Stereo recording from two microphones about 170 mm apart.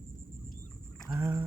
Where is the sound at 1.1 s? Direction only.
15° right (ahead or behind).